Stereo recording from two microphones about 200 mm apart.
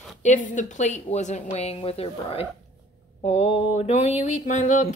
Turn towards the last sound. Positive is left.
turn(degrees=40)  # may be behind; listen again after turning